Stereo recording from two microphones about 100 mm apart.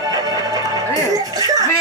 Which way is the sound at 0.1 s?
40° right (ahead or behind).